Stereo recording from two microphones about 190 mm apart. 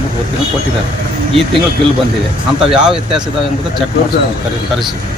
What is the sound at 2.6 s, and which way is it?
Speech, 5° right (ahead or behind).